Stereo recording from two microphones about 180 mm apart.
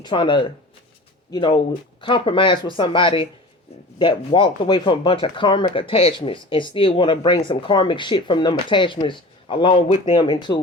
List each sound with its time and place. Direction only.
0.0 s speech: 25° left (ahead or behind)